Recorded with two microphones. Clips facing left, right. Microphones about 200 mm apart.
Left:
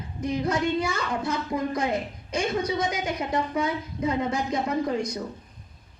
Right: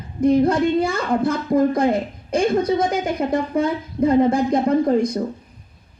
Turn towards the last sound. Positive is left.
turn(degrees=-55)  # may be behind; listen again after turning